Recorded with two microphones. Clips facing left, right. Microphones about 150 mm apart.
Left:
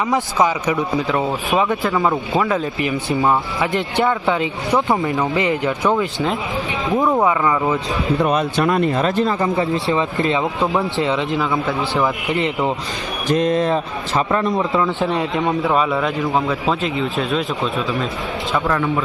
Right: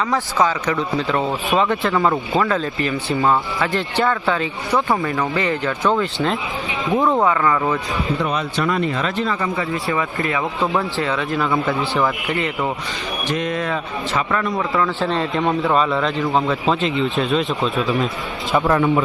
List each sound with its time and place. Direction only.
0.1 s speech: 15° left (ahead or behind)
2.5 s speech: 15° left (ahead or behind)
6.9 s a man's voice: centre (ahead or behind)
7.3 s speech: 15° left (ahead or behind)
8.2 s a man's voice: 50° left (ahead or behind)
9.6 s a man's voice: 25° left (ahead or behind)
11.3 s a man's voice: centre (ahead or behind)
11.8 s a man's voice: 20° left (ahead or behind)
13.2 s a man's voice: 35° left (ahead or behind); by 15.3 s 15° left (ahead or behind)
15.4 s a man's voice: 5° left (ahead or behind)
18.5 s speech: 20° right (ahead or behind)